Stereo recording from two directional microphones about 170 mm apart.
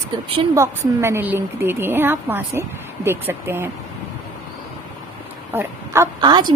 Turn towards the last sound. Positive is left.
turn(degrees=-25)  # may be behind; listen again after turning